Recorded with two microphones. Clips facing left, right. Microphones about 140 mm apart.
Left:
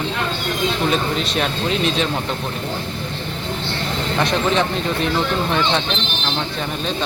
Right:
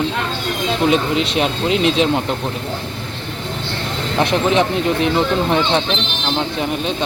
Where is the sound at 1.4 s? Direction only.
20° right (ahead or behind).